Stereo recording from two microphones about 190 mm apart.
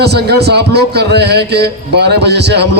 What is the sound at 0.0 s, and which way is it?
A man's voice, 60° right (ahead or behind).